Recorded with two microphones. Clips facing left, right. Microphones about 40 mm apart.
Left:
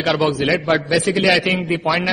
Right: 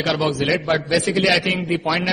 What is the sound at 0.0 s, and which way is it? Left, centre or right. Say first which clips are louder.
Mantra: left 3 dB; centre.